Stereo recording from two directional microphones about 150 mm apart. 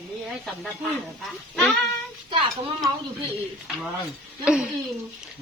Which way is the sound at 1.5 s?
Centre (ahead or behind).